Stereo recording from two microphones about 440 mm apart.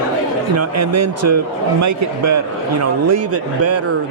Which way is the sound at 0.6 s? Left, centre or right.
Right.